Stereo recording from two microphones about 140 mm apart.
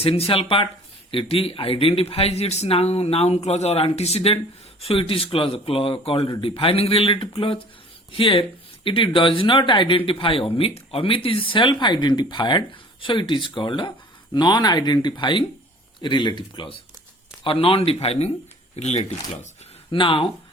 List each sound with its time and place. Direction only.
0.0 s speech: 40° left (ahead or behind)
19.9 s speech: 40° left (ahead or behind)